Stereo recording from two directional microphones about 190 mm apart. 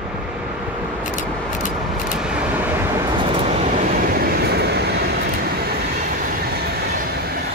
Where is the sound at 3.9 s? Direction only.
50° right (ahead or behind).